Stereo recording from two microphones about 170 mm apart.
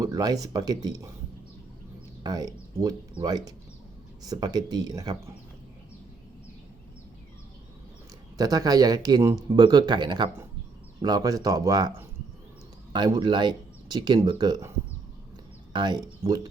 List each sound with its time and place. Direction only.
0.0 s speech: 20° right (ahead or behind)
2.2 s speech: 20° right (ahead or behind)
8.4 s speech: 20° right (ahead or behind)
15.7 s speech: 25° right (ahead or behind)